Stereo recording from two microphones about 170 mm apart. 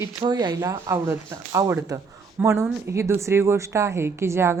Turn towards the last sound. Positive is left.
turn(degrees=-15)  # may be behind; listen again after turning